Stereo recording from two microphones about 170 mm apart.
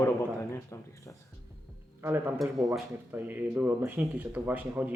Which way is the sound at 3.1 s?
10° right (ahead or behind).